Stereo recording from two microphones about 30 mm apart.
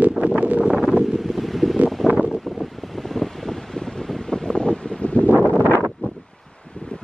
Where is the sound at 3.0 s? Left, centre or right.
Centre.